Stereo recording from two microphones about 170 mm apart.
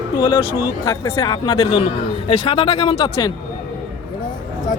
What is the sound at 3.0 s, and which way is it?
Speech, 20° left (ahead or behind).